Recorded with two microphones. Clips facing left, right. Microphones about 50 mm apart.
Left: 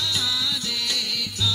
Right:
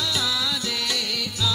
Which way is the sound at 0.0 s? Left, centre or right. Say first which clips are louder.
Right 1 dB; centre.